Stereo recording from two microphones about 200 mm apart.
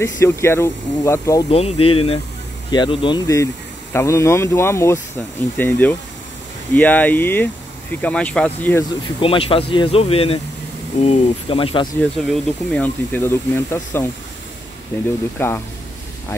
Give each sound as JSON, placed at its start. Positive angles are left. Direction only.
{"t": 0.0, "sound": "speech", "side_deg": 15}
{"t": 1.5, "sound": "speech", "side_deg": 30}
{"t": 9.2, "sound": "speech", "side_deg": 25}
{"t": 12.0, "sound": "speech", "side_deg": 5}
{"t": 15.3, "sound": "speech", "side_deg": 10}